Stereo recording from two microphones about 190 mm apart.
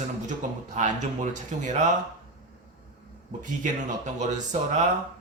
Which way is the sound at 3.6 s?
40° right (ahead or behind).